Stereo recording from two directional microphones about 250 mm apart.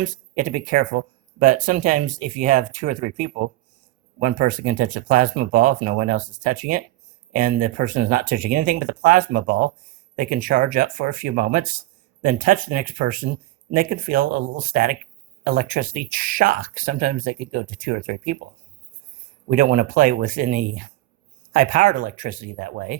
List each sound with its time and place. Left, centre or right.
0.0 s speech: right
19.5 s speech: right